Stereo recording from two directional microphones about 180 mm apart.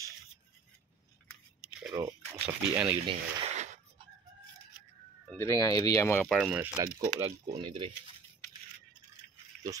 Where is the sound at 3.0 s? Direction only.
35° right (ahead or behind).